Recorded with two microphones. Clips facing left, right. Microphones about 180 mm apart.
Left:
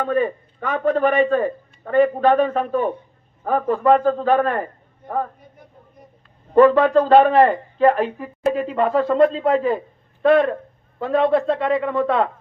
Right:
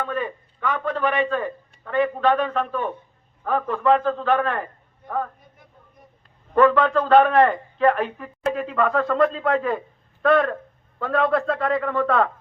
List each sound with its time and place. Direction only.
0.0 s a man's voice: 50° left (ahead or behind); by 11.7 s 25° left (ahead or behind)
11.7 s a man's voice: 5° left (ahead or behind)
11.9 s a man's voice: 25° left (ahead or behind)